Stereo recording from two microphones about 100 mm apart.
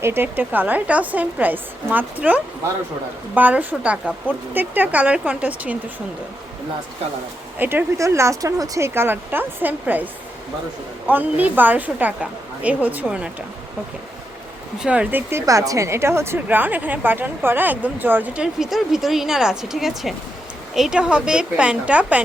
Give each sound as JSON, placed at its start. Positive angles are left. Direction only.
{"t": 0.0, "sound": "a woman's voice", "side_deg": -20}
{"t": 7.6, "sound": "a woman's voice", "side_deg": -20}
{"t": 7.9, "sound": "speech", "side_deg": -30}
{"t": 9.0, "sound": "a woman's voice", "side_deg": -20}
{"t": 14.8, "sound": "a woman's voice", "side_deg": -10}
{"t": 15.3, "sound": "a woman's voice", "side_deg": -30}
{"t": 18.6, "sound": "a woman's voice", "side_deg": -5}